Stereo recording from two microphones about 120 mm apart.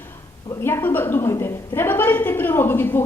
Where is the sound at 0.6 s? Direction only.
20° left (ahead or behind).